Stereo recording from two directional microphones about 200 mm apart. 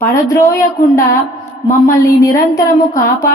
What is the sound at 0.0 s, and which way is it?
Speech, 15° left (ahead or behind).